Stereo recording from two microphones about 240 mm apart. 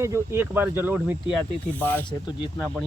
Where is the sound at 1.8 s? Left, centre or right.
Centre.